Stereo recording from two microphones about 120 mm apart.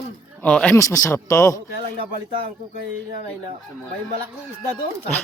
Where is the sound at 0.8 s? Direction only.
25° left (ahead or behind).